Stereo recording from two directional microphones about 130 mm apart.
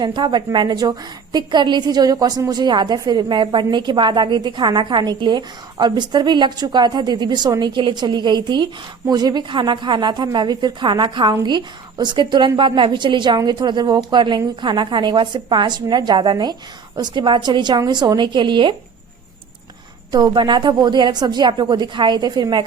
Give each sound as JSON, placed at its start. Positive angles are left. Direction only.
{"t": 0.0, "sound": "a woman's voice", "side_deg": -35}
{"t": 20.1, "sound": "a woman's voice", "side_deg": -30}